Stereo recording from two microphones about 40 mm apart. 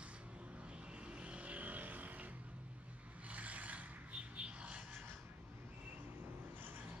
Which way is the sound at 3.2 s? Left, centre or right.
Right.